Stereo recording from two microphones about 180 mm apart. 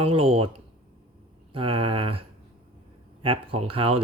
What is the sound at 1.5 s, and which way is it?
Speech, 30° right (ahead or behind).